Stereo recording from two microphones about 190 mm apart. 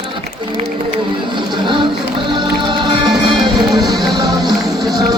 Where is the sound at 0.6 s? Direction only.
25° right (ahead or behind).